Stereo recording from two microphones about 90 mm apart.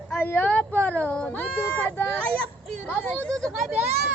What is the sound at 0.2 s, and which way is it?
Speech, 20° left (ahead or behind).